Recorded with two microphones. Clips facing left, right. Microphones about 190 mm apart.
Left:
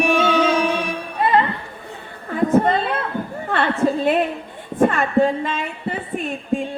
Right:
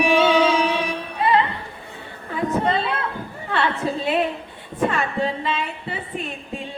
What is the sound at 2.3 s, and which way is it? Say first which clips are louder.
Chatter: left 5 dB; 50° left (ahead or behind).